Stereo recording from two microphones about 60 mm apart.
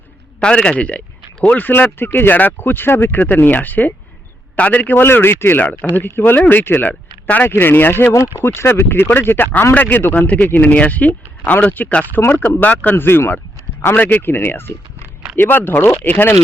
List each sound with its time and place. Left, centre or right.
0.3 s speech: centre
7.4 s speech: left
8.1 s speech: left
13.0 s speech: left
13.9 s speech: left